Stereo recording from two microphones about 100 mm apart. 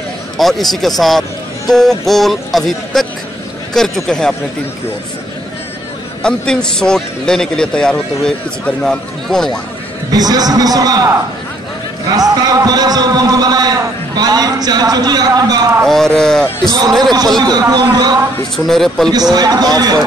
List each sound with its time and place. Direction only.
0.4 s speech: centre (ahead or behind)
6.2 s a man's voice: 10° left (ahead or behind)
10.1 s a man's voice: 40° right (ahead or behind)
15.8 s speech: 5° left (ahead or behind)
17.4 s speech: 40° right (ahead or behind)
18.7 s speech: 5° left (ahead or behind)
19.3 s a man's voice: 40° right (ahead or behind)